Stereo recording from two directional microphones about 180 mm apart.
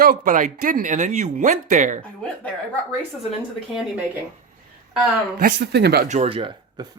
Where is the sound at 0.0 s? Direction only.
50° right (ahead or behind).